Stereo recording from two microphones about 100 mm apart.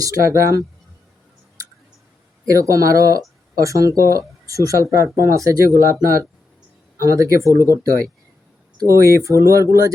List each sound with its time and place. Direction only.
0.0 s speech: 30° right (ahead or behind)
2.5 s speech: 35° right (ahead or behind)